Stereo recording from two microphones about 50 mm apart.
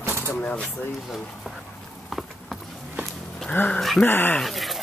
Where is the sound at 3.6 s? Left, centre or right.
Left.